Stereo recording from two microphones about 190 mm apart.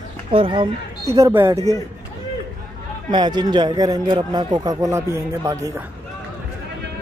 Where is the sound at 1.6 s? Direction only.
20° left (ahead or behind).